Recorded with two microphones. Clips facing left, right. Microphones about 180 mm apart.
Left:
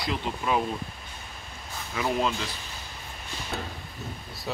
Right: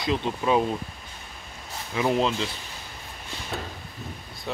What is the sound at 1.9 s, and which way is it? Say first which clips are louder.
Speech: right 4 dB; 25° right (ahead or behind).